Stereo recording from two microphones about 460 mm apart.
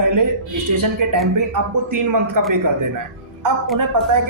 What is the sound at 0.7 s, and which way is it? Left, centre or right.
Speech, right.